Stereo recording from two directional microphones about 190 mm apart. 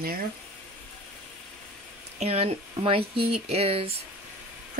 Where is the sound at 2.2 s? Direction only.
35° right (ahead or behind).